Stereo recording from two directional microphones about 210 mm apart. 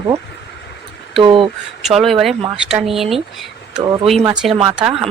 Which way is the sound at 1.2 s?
25° right (ahead or behind).